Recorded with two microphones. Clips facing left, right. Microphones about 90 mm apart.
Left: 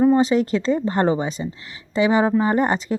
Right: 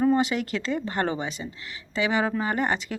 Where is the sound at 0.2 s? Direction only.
35° left (ahead or behind).